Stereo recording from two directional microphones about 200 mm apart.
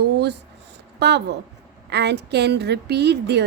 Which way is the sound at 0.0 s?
55° right (ahead or behind).